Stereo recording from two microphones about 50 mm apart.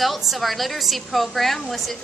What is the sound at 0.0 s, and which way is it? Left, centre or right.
A woman's voice, centre.